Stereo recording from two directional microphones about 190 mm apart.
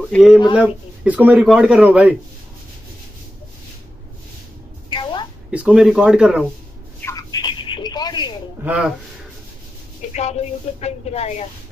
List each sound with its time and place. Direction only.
0.1 s speech: centre (ahead or behind)
4.8 s music: 25° left (ahead or behind)
5.5 s speech: 5° right (ahead or behind)
7.0 s telephone: 15° left (ahead or behind)
8.6 s speech: 5° right (ahead or behind)
10.1 s speech: 35° left (ahead or behind)